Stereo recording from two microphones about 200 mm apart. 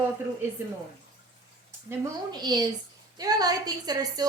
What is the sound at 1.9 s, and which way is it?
A woman's voice, 15° right (ahead or behind).